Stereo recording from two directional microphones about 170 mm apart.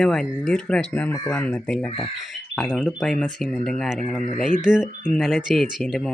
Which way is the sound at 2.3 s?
Centre (ahead or behind).